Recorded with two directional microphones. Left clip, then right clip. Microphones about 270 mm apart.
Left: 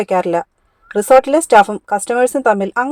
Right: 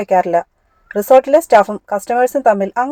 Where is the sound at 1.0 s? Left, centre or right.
Left.